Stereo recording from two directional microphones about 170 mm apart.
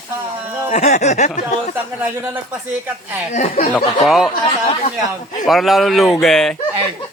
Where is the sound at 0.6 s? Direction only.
45° left (ahead or behind).